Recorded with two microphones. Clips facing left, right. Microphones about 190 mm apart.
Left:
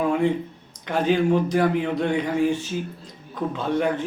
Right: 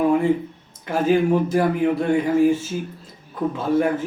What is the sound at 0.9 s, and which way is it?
A man's voice, 5° right (ahead or behind).